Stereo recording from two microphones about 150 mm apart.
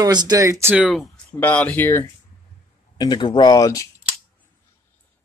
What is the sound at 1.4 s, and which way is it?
Speech, 10° left (ahead or behind).